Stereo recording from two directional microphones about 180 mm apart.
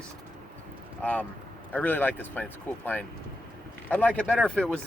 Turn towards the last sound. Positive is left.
turn(degrees=5)  # may be behind; listen again after turning